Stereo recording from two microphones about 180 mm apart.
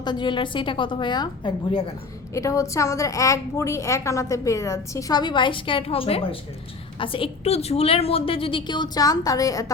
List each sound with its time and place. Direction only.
0.0 s a woman's voice: 25° left (ahead or behind)